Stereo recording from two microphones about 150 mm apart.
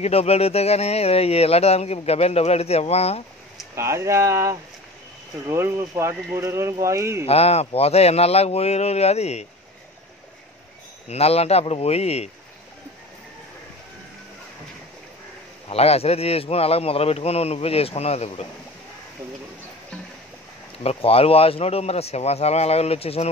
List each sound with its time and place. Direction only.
0.0 s speech: 45° left (ahead or behind)
3.7 s speech: 20° right (ahead or behind)
7.2 s speech: 45° left (ahead or behind)
11.1 s speech: 45° left (ahead or behind)
15.7 s speech: 40° left (ahead or behind)
20.8 s speech: 40° left (ahead or behind)